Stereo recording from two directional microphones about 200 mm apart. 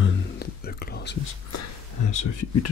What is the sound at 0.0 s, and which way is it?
Whispering, 50° left (ahead or behind).